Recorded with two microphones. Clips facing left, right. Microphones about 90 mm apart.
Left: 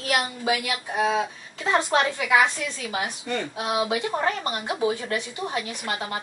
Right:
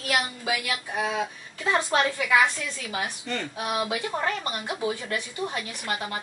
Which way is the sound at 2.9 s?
10° left (ahead or behind).